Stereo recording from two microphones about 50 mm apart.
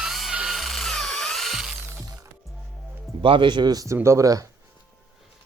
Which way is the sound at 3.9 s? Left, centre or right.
Right.